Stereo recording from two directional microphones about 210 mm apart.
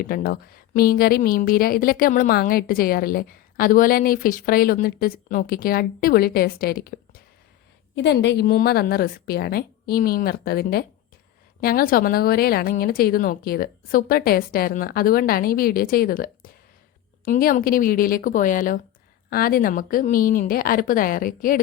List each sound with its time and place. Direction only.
0.0 s a woman's voice: 45° left (ahead or behind)
7.9 s a woman's voice: 55° left (ahead or behind); by 21.6 s 40° left (ahead or behind)